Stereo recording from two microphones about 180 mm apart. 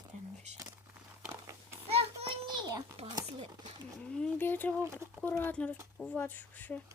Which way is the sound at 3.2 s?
35° right (ahead or behind).